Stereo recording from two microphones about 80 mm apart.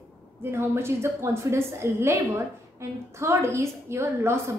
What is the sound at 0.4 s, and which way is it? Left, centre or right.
A woman's voice, right.